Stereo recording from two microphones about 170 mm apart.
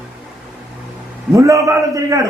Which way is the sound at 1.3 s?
20° right (ahead or behind).